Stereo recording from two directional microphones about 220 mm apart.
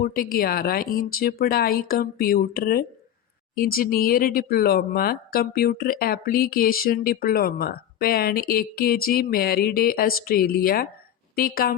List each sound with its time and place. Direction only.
0.0 s speech: 40° left (ahead or behind)